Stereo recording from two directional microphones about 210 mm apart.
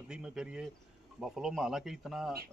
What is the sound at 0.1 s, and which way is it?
A man's voice, 5° right (ahead or behind).